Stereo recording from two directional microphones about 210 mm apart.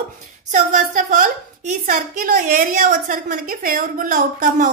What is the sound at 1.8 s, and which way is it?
A woman's voice, 40° right (ahead or behind).